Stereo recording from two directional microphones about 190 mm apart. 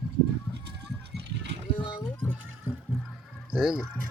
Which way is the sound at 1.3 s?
65° right (ahead or behind).